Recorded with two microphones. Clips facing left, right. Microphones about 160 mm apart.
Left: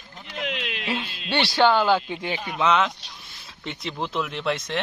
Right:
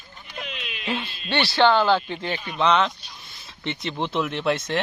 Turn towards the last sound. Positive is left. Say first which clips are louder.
# right 3 dB
turn(degrees=0)  # may be behind; listen again after turning